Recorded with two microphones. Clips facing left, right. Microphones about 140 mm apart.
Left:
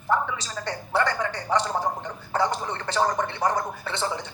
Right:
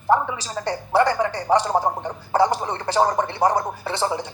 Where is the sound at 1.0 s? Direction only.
35° right (ahead or behind).